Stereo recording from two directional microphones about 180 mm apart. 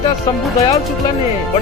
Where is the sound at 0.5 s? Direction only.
20° left (ahead or behind).